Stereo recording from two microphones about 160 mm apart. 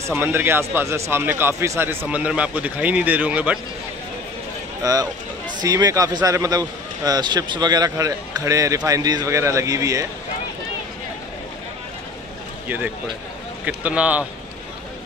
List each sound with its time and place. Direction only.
0.1 s a man's voice: 15° right (ahead or behind)
4.8 s speech: 25° right (ahead or behind)
12.6 s a man's voice: 10° right (ahead or behind)